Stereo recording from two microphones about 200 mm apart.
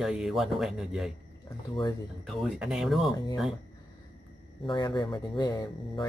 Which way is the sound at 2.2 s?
5° right (ahead or behind).